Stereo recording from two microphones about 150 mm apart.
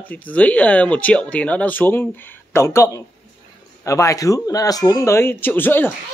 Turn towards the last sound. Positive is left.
turn(degrees=15)  # may be behind; listen again after turning